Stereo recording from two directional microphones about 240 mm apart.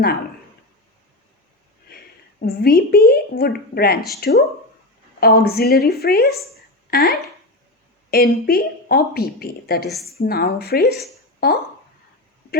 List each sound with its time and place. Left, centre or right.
2.4 s speech: left